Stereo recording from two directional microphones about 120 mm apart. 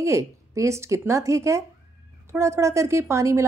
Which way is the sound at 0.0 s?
25° right (ahead or behind).